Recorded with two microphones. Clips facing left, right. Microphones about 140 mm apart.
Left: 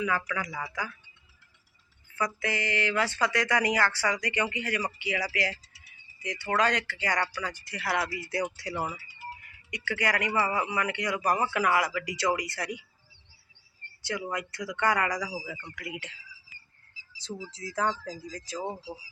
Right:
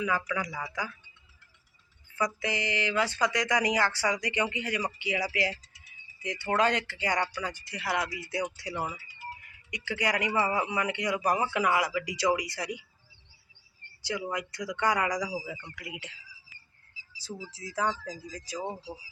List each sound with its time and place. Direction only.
0.0 s speech: 15° right (ahead or behind)
2.1 s a man's voice: 15° right (ahead or behind)
8.0 s speech: centre (ahead or behind)
9.6 s a man's voice: 15° right (ahead or behind)
14.0 s speech: 10° right (ahead or behind)
17.5 s speech: 10° right (ahead or behind)
18.6 s speech: 5° left (ahead or behind)